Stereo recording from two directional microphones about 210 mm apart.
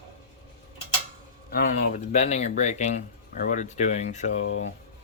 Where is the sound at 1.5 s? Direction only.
40° left (ahead or behind).